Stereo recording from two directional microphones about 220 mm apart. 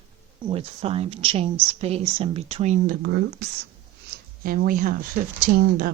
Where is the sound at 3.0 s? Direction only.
50° right (ahead or behind).